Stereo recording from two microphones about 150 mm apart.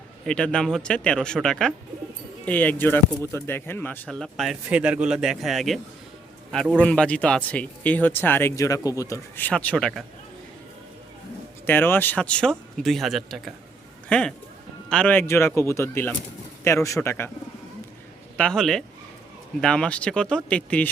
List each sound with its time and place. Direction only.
0.3 s speech: 5° left (ahead or behind)
11.6 s speech: 15° left (ahead or behind)
18.3 s speech: 5° left (ahead or behind)